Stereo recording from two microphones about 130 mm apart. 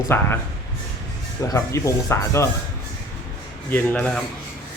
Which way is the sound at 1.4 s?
25° left (ahead or behind).